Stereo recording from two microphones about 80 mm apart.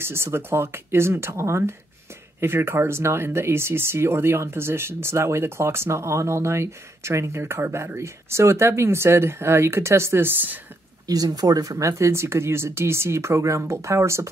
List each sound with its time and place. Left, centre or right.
0.0 s speech: right
11.1 s speech: right